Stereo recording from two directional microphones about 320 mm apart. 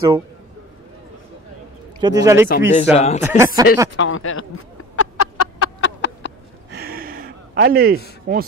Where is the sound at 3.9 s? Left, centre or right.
Left.